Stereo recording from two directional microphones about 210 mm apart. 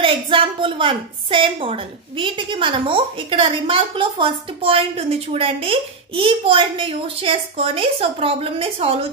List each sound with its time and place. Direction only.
0.0 s a woman's voice: 25° right (ahead or behind)